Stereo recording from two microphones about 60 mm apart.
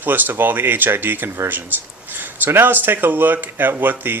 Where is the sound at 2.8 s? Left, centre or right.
Right.